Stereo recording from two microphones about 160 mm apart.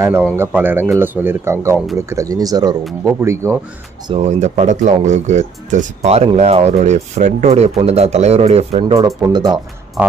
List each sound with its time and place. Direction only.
0.4 s speech: 10° right (ahead or behind)
4.1 s speech: 45° right (ahead or behind)
8.9 s speech: 20° right (ahead or behind)
10.0 s speech: 10° right (ahead or behind)